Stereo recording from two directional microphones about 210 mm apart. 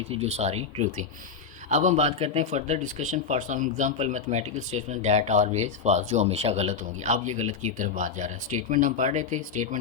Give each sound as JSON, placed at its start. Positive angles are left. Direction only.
{"t": 0.1, "sound": "speech", "side_deg": -30}